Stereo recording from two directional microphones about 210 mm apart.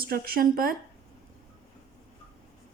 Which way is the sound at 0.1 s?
45° right (ahead or behind).